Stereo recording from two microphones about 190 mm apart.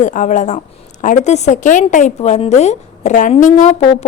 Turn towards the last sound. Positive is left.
turn(degrees=40)  # may be behind; listen again after turning